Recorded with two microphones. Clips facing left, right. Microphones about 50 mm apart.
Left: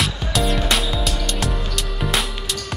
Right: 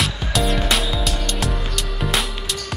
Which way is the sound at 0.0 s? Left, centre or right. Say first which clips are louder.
Even; centre.